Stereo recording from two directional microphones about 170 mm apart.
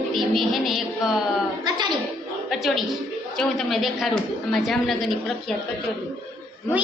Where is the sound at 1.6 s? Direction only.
25° right (ahead or behind).